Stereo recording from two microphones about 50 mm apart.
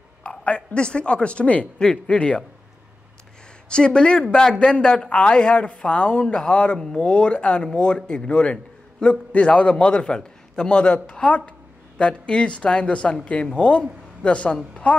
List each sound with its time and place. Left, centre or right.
0.2 s speech: left
3.6 s speech: centre